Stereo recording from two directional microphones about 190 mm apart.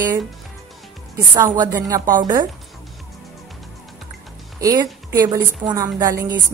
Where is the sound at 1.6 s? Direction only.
20° right (ahead or behind).